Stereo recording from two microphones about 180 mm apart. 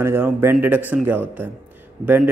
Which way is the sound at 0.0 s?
10° right (ahead or behind).